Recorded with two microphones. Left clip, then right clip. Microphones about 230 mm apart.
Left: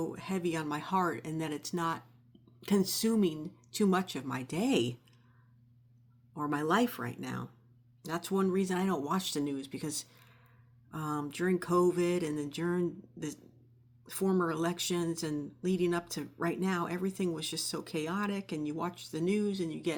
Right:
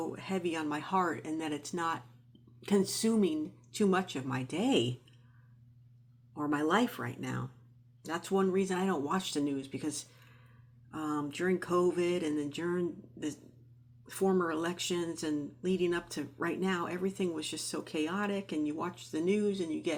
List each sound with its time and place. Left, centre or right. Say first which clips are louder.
0.1 s speech: even; left
6.3 s speech: even; left